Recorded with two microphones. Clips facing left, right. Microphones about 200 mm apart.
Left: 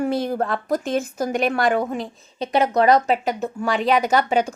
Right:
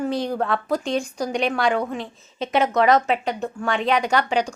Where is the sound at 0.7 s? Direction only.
Centre (ahead or behind).